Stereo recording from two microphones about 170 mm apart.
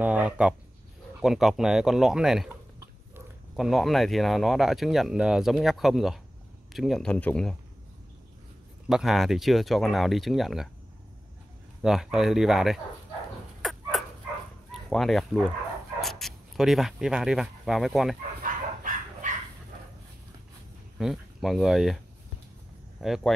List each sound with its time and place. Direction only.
0.0 s speech: 10° right (ahead or behind)
3.5 s speech: centre (ahead or behind)
8.8 s speech: centre (ahead or behind)
11.8 s speech: 5° right (ahead or behind)
13.6 s dog: centre (ahead or behind)
14.7 s speech: centre (ahead or behind)
18.4 s dog: 50° right (ahead or behind)
21.0 s speech: centre (ahead or behind)